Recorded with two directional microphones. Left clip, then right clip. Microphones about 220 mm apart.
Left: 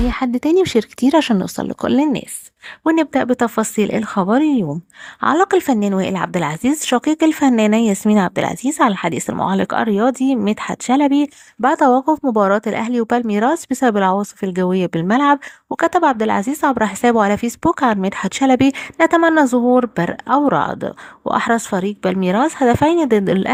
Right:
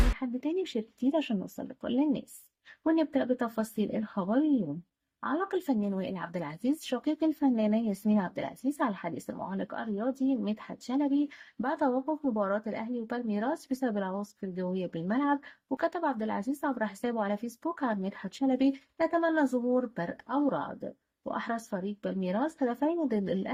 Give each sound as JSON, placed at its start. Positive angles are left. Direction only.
{"t": 0.2, "sound": "a woman's voice", "side_deg": 45}